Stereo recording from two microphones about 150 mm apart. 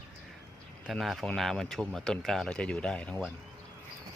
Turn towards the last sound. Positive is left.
turn(degrees=5)  # may be behind; listen again after turning